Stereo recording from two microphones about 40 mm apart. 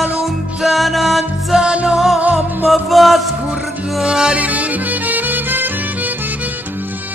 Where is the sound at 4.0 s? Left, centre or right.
Centre.